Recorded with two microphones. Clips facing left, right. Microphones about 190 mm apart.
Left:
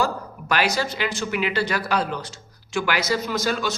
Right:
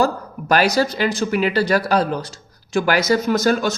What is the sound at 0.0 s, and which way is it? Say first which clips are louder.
A man's voice: right 5 dB; 40° right (ahead or behind).